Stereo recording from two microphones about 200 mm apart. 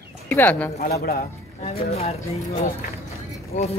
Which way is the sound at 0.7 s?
45° left (ahead or behind).